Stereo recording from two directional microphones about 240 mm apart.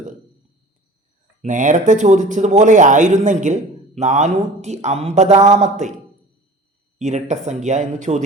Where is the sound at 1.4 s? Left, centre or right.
Right.